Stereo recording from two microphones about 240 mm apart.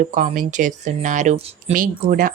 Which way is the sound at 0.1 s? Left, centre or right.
Right.